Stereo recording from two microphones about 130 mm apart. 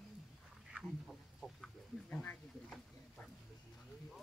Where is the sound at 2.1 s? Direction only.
15° left (ahead or behind).